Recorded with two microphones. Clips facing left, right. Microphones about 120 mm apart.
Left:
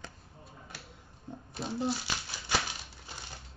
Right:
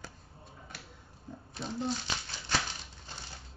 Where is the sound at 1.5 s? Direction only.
5° left (ahead or behind).